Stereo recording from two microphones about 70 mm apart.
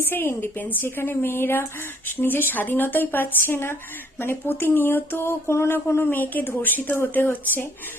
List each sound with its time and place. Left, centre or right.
0.0 s a woman's voice: left